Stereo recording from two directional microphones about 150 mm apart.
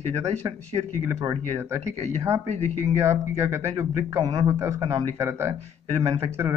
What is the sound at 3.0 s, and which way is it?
Speech, 20° right (ahead or behind).